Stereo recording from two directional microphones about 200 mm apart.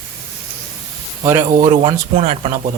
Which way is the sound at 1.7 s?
30° right (ahead or behind).